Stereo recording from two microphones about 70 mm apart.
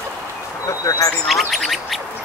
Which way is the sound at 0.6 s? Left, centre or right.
Left.